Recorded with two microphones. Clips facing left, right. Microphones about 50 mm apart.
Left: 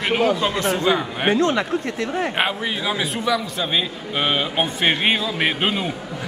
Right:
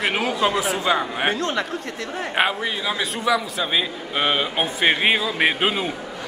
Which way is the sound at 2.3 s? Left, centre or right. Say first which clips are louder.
Right 1 dB; centre.